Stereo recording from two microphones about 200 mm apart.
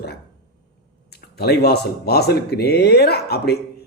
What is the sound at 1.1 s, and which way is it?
Speech, 55° left (ahead or behind).